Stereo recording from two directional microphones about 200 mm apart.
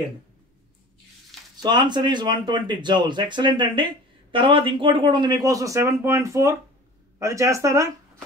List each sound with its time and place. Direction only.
1.6 s speech: 20° right (ahead or behind)